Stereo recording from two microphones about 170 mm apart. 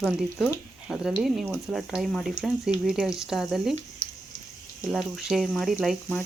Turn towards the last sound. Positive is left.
turn(degrees=0)  # may be behind; listen again after turning